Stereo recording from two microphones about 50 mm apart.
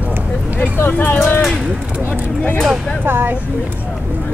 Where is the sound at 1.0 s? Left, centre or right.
Left.